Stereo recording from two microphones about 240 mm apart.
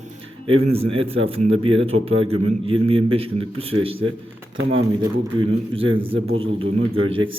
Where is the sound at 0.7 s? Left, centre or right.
Right.